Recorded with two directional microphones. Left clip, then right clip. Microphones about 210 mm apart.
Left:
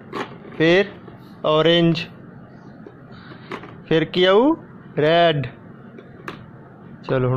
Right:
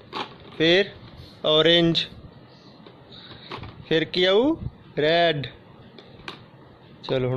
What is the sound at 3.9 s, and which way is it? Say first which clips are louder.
Speech: left 4 dB; 10° right (ahead or behind).